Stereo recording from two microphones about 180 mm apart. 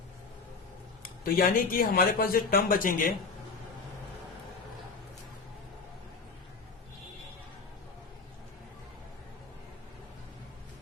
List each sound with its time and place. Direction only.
1.2 s speech: 55° left (ahead or behind)